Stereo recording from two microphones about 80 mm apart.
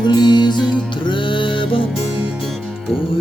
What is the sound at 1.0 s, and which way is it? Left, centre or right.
Music, left.